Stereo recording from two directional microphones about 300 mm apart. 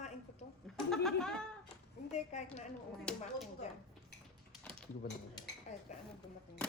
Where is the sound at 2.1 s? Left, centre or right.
Left.